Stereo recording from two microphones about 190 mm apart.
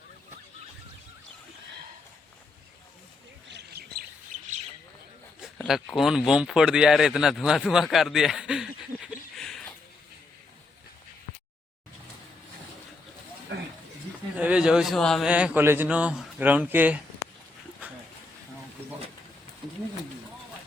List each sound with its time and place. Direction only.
3.5 s chirp: 55° right (ahead or behind)
5.6 s speech: centre (ahead or behind)
14.3 s speech: 5° right (ahead or behind)